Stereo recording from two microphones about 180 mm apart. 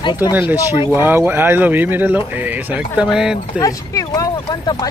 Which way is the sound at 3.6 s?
20° left (ahead or behind).